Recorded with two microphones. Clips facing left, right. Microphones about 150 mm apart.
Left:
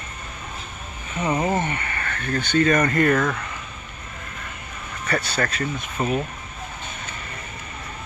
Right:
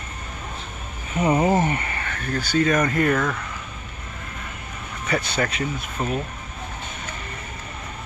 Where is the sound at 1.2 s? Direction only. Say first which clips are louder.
Right 4 dB; 20° right (ahead or behind).